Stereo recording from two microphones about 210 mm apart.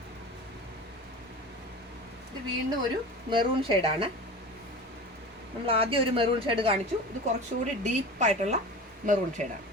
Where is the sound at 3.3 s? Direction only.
25° right (ahead or behind).